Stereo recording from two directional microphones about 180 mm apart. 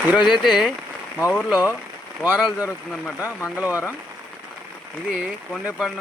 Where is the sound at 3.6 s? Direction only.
10° right (ahead or behind).